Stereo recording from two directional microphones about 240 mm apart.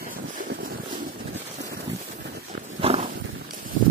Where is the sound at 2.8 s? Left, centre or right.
Right.